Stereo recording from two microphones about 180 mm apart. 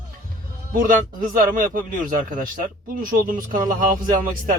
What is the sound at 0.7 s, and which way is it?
Speech, 50° right (ahead or behind).